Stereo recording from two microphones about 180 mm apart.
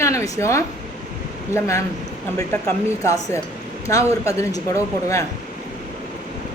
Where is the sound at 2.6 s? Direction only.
15° left (ahead or behind).